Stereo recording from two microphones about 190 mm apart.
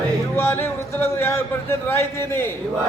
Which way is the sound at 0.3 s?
10° left (ahead or behind).